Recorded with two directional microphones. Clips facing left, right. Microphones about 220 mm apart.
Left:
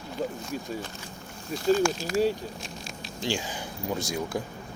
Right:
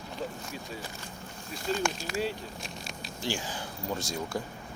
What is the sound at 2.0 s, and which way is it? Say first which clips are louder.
Speech: left 9 dB; 45° left (ahead or behind).